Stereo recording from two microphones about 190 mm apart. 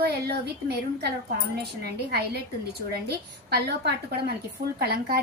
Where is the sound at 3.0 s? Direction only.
55° right (ahead or behind).